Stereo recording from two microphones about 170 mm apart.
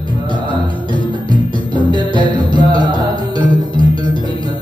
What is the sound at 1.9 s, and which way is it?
Music, 25° right (ahead or behind).